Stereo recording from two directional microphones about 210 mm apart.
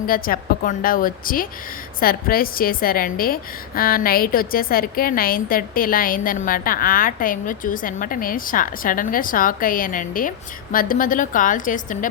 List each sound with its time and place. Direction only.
0.1 s a woman's voice: 40° left (ahead or behind)